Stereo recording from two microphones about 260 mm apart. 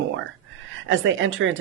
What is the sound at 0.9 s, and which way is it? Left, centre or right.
Speech, right.